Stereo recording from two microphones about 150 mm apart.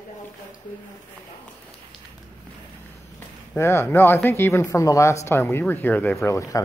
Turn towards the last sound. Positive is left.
turn(degrees=20)  # may be behind; listen again after turning